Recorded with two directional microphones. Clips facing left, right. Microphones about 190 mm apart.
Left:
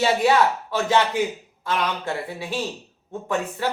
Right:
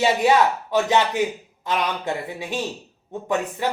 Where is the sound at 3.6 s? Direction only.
15° right (ahead or behind).